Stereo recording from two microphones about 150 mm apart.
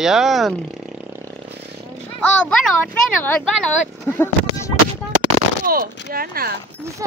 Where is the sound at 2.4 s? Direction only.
5° left (ahead or behind).